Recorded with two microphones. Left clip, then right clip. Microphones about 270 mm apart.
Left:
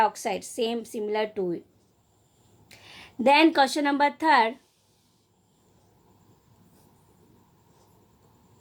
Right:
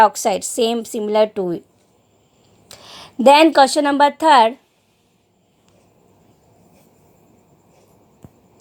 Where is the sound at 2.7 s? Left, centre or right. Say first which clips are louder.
Right 9 dB; right.